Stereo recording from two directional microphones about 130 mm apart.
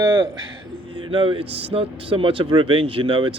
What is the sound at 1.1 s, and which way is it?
Speech, 40° right (ahead or behind).